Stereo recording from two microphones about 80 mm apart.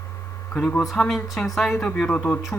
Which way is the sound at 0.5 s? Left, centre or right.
Centre.